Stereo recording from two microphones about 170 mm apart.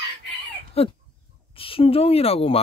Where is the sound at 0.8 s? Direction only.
35° left (ahead or behind).